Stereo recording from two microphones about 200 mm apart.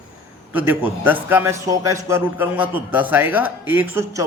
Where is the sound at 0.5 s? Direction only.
10° right (ahead or behind).